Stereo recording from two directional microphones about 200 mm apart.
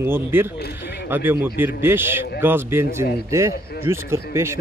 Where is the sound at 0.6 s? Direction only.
55° left (ahead or behind).